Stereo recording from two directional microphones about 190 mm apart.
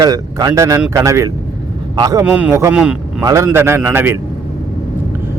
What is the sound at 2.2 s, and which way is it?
A man's voice, 5° right (ahead or behind).